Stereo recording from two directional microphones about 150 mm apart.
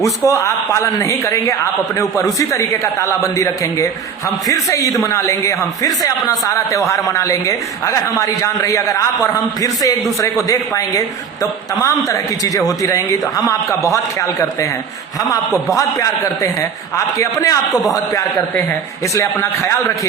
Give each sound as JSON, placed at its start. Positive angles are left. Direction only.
{"t": 0.3, "sound": "speech", "side_deg": 20}
{"t": 15.7, "sound": "speech", "side_deg": 20}
{"t": 19.1, "sound": "a man's voice", "side_deg": 15}